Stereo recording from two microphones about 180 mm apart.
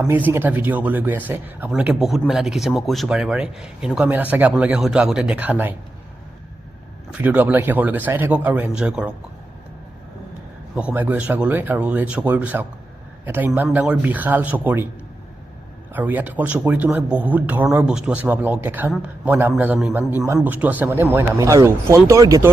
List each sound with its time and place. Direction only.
0.3 s speech: 10° right (ahead or behind)
7.1 s speech: 10° right (ahead or behind)
10.8 s speech: 10° right (ahead or behind)
15.9 s speech: 10° right (ahead or behind)